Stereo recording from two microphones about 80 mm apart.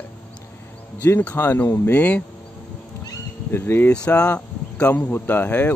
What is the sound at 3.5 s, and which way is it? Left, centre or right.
Speech, left.